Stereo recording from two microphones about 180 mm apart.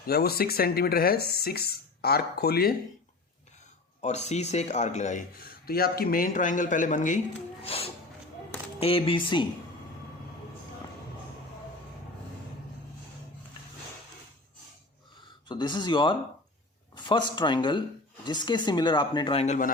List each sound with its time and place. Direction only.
0.0 s speech: 60° left (ahead or behind)
4.0 s speech: 40° left (ahead or behind)
5.4 s speech: 55° left (ahead or behind)
7.6 s speech: 35° left (ahead or behind)
15.4 s speech: 25° left (ahead or behind); by 19.7 s 45° left (ahead or behind)